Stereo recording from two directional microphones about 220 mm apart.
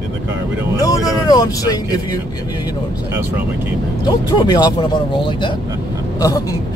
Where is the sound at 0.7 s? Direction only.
15° left (ahead or behind).